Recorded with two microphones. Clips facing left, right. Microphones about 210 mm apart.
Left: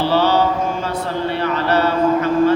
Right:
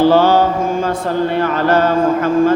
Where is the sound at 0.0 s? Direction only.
50° right (ahead or behind).